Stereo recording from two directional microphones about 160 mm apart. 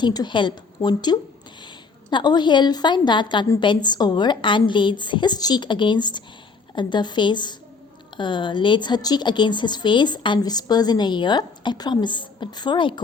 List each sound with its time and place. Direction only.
0.0 s a woman's voice: 25° left (ahead or behind)